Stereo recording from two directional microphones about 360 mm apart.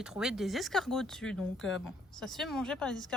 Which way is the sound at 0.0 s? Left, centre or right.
Centre.